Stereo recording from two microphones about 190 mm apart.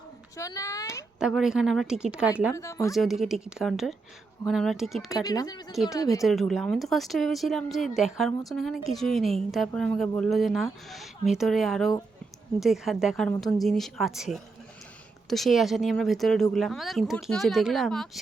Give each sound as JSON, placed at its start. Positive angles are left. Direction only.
{"t": 0.3, "sound": "a child's voice", "side_deg": 15}
{"t": 1.2, "sound": "speech", "side_deg": 0}
{"t": 2.6, "sound": "a child's voice", "side_deg": 15}
{"t": 2.9, "sound": "speech", "side_deg": 0}
{"t": 5.1, "sound": "a child's voice", "side_deg": 20}
{"t": 6.2, "sound": "speech", "side_deg": 0}